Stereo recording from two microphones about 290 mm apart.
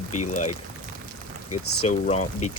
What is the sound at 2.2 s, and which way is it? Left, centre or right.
Speech, left.